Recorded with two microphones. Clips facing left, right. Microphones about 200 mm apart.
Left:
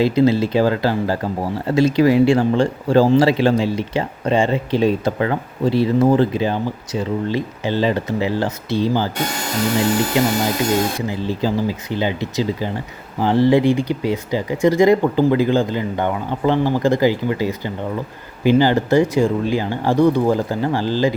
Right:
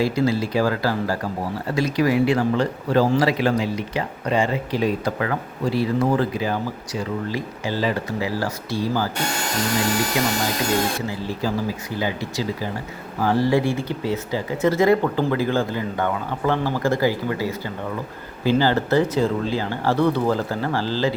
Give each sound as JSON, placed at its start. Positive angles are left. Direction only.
{"t": 0.0, "sound": "speech", "side_deg": 20}
{"t": 10.2, "sound": "speech", "side_deg": 25}